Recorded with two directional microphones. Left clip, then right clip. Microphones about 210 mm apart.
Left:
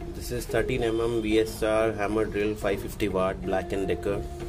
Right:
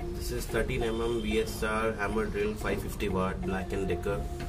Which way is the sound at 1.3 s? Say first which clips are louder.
Left 9 dB; 45° left (ahead or behind).